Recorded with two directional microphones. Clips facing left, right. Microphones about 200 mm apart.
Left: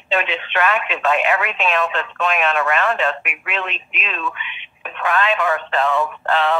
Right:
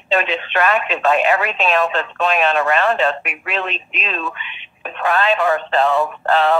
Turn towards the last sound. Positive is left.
turn(degrees=-40)  # may be behind; listen again after turning